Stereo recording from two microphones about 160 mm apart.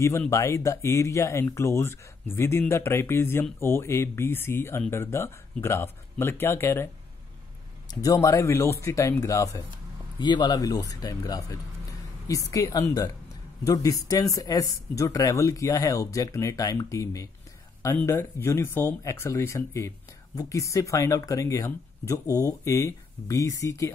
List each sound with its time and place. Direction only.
0.3 s speech: 20° left (ahead or behind)
7.9 s speech: 25° left (ahead or behind)